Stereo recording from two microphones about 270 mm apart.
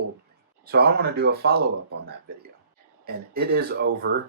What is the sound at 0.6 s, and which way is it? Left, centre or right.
Speech, right.